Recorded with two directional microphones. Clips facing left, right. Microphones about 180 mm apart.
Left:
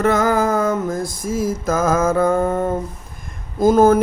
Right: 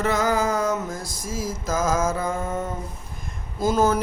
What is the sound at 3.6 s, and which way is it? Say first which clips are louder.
Speech: left 8 dB; 50° left (ahead or behind).